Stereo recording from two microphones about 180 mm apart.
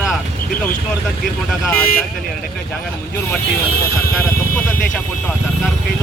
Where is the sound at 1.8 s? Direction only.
55° left (ahead or behind).